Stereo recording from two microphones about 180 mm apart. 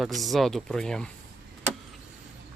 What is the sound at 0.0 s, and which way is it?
Speech, centre (ahead or behind).